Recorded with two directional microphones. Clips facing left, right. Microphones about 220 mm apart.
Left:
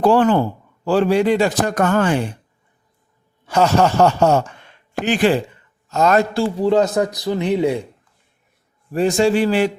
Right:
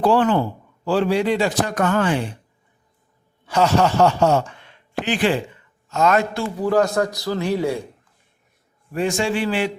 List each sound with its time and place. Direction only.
0.0 s a man's voice: 45° left (ahead or behind)
3.4 s a man's voice: 45° left (ahead or behind); by 7.8 s 20° left (ahead or behind)
8.9 s a man's voice: 35° left (ahead or behind)